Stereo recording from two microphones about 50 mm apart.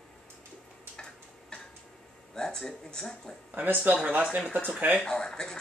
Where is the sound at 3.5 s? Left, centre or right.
Right.